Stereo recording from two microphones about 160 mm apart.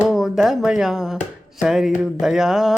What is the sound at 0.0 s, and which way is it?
A woman's voice, centre (ahead or behind).